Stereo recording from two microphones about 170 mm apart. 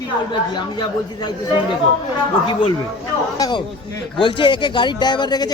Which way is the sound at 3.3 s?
20° left (ahead or behind).